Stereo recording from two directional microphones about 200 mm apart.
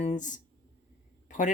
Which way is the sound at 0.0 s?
40° left (ahead or behind).